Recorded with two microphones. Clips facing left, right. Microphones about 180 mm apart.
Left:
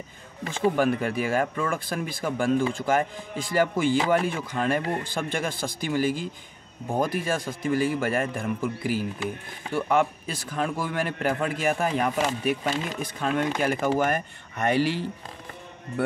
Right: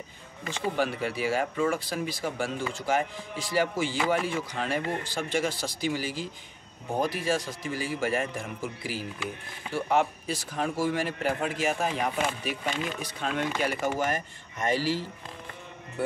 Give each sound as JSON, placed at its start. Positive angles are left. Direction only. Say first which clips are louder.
{"t": 0.5, "sound": "a man's voice", "louder": "left 6 dB", "side_deg": 50}